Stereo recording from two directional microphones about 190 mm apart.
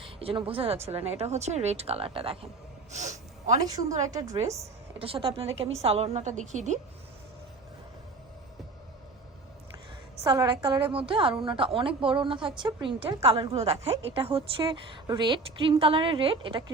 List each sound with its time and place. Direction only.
0.0 s speech: 30° right (ahead or behind)
2.9 s a sound: 40° right (ahead or behind)
3.7 s a woman's voice: 20° right (ahead or behind)
4.9 s speech: 30° right (ahead or behind)
10.2 s a woman's voice: 20° right (ahead or behind)